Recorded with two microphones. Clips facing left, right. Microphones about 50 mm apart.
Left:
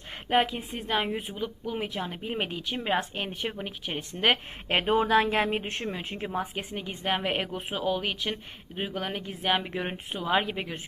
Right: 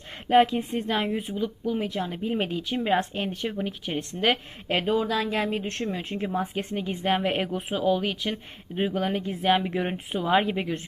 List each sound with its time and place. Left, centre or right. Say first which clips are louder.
0.3 s speech: right 6 dB; centre
2.2 s speech: right 5 dB; centre
2.6 s speech: right 4 dB; centre
4.3 s speech: left 1 dB; left
5.6 s speech: right 3 dB; centre